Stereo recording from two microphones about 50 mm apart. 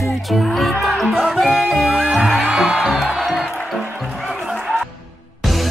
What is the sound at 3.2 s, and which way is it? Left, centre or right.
Music, centre.